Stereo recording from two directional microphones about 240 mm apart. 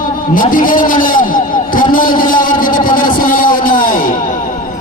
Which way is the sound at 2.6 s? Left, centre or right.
Left.